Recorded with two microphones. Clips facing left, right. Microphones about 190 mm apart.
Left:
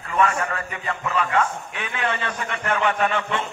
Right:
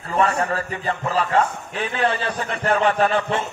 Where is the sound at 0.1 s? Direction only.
35° right (ahead or behind).